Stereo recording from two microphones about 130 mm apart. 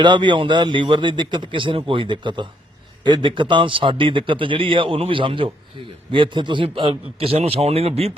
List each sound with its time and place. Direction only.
0.0 s a man's voice: 35° right (ahead or behind)